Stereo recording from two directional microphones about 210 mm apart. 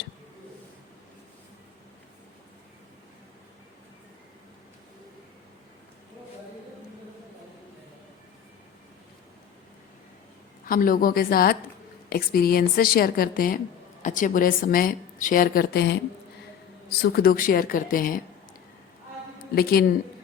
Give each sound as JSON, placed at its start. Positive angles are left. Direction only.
{"t": 10.7, "sound": "a woman's voice", "side_deg": 40}
{"t": 17.0, "sound": "a woman's voice", "side_deg": 45}
{"t": 19.5, "sound": "speech", "side_deg": 45}